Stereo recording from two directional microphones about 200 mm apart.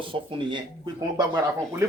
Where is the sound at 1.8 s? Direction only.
15° right (ahead or behind).